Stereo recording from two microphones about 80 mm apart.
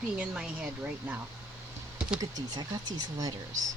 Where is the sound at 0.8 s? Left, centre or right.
Centre.